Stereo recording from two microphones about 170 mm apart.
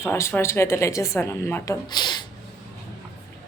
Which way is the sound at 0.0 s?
15° left (ahead or behind).